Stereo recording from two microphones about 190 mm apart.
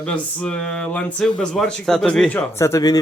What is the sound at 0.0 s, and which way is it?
Speech, 5° left (ahead or behind).